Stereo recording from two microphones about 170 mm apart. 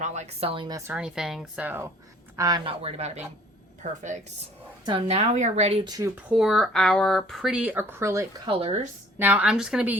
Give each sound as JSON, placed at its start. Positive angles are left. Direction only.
{"t": 0.0, "sound": "speech", "side_deg": -40}
{"t": 0.8, "sound": "speech", "side_deg": -10}
{"t": 2.6, "sound": "speech", "side_deg": -40}
{"t": 4.9, "sound": "speech", "side_deg": -35}
{"t": 6.3, "sound": "speech", "side_deg": 0}
{"t": 8.4, "sound": "speech", "side_deg": -35}
{"t": 9.1, "sound": "speech", "side_deg": -10}